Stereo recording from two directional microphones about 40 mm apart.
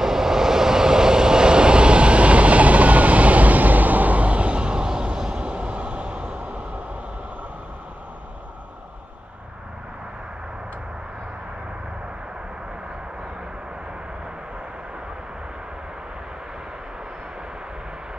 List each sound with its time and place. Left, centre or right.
0.0 s vehicle: centre; by 6.8 s right